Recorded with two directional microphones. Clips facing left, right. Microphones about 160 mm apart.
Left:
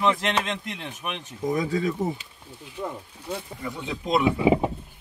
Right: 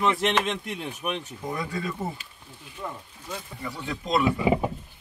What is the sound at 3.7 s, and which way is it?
Speech, 15° left (ahead or behind).